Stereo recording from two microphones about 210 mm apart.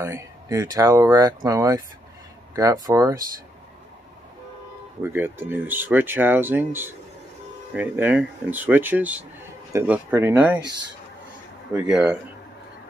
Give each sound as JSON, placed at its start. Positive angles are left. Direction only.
{"t": 0.0, "sound": "speech", "side_deg": -15}
{"t": 5.0, "sound": "speech", "side_deg": -10}
{"t": 11.7, "sound": "speech", "side_deg": -5}